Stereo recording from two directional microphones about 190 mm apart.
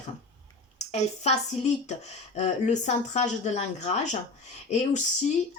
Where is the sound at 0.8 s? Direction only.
35° left (ahead or behind).